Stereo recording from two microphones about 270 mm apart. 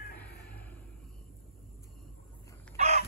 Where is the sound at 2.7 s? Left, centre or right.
Right.